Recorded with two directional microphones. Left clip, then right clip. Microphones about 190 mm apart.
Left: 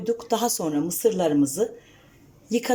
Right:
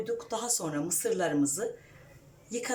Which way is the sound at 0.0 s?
45° left (ahead or behind).